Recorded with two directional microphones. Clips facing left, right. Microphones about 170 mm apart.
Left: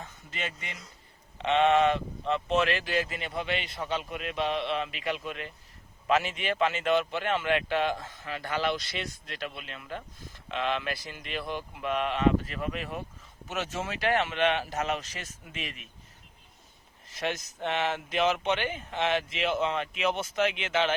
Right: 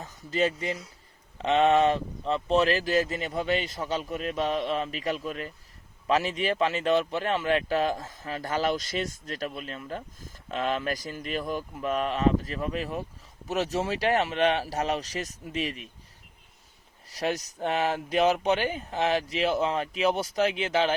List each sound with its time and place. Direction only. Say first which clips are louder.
0.0 s a man's voice: right 11 dB; 35° right (ahead or behind)
17.1 s a man's voice: right 4 dB; 35° right (ahead or behind)